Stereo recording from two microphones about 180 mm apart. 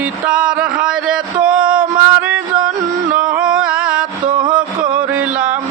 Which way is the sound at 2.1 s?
10° right (ahead or behind).